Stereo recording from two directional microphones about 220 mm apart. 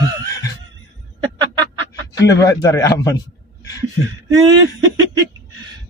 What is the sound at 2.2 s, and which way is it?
Speech, 15° left (ahead or behind).